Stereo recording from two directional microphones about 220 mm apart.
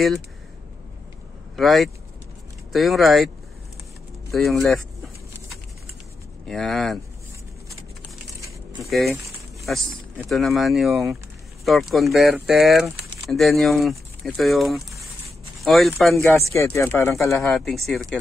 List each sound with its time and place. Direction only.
1.6 s speech: centre (ahead or behind)
4.3 s speech: centre (ahead or behind)
6.4 s speech: centre (ahead or behind)
8.8 s speech: centre (ahead or behind)
16.2 s speech: 10° left (ahead or behind)
17.4 s speech: centre (ahead or behind)